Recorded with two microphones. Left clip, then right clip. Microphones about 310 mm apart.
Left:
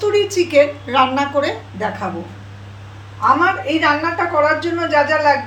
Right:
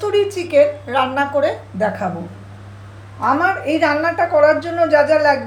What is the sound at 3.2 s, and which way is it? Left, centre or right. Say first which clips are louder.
Speech: left 2 dB; right.